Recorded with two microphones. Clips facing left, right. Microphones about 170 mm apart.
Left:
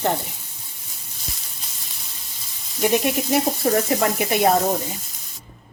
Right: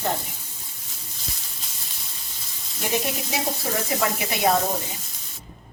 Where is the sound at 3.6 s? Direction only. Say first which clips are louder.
Left 5 dB; 50° left (ahead or behind).